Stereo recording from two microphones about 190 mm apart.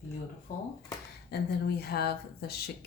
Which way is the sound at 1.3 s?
60° left (ahead or behind).